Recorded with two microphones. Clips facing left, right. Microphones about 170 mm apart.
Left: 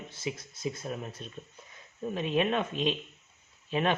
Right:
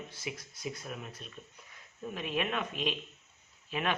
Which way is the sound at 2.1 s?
30° left (ahead or behind).